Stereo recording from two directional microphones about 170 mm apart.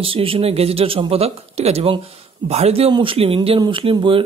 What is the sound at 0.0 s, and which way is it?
Speech, 30° right (ahead or behind).